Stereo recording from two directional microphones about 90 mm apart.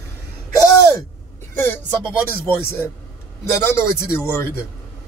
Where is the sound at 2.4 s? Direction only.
25° left (ahead or behind).